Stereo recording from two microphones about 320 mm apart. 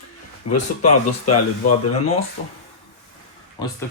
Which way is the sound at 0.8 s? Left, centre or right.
Left.